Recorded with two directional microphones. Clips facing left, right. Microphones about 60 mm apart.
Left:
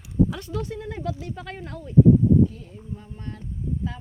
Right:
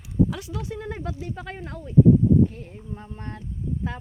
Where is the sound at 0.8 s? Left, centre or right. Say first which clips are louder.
Left 1 dB; right; by 1.9 s centre.